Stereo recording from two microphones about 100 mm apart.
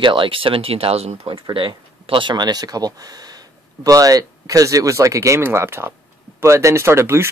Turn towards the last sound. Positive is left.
turn(degrees=-25)  # may be behind; listen again after turning